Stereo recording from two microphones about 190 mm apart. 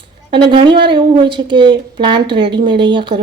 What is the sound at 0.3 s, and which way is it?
Speech, 25° right (ahead or behind).